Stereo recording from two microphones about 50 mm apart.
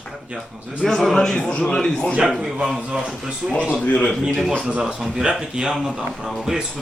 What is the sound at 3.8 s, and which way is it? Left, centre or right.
Speech, left.